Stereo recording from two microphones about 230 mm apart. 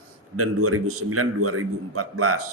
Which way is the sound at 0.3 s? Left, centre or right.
Right.